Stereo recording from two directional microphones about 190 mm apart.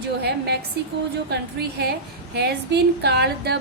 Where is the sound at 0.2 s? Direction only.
60° right (ahead or behind).